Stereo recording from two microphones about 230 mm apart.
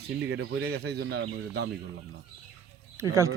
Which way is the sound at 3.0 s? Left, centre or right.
Centre.